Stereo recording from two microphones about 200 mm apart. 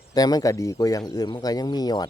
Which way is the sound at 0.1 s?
20° left (ahead or behind).